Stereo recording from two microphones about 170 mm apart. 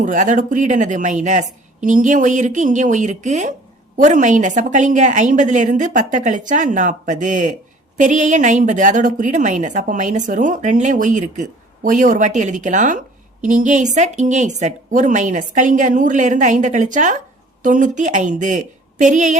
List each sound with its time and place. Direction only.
0.0 s a woman's voice: 45° right (ahead or behind)